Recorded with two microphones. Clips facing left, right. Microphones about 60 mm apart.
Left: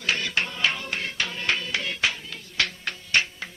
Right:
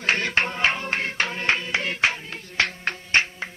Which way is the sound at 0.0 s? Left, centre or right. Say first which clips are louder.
Right 4 dB; right.